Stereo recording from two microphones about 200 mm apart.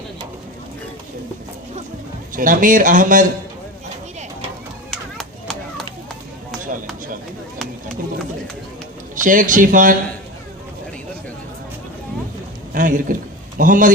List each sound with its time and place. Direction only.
2.3 s a man's voice: 40° right (ahead or behind)
4.9 s a sound: centre (ahead or behind)
9.2 s a man's voice: 40° right (ahead or behind)
12.7 s a man's voice: 40° right (ahead or behind)